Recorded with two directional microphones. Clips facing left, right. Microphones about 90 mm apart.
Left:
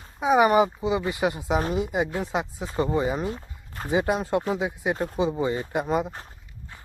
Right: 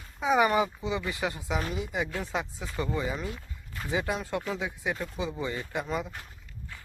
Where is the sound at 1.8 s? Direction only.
25° left (ahead or behind).